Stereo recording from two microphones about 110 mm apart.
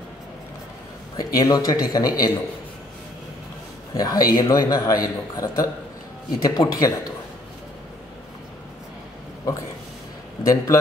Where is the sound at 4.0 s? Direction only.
35° left (ahead or behind).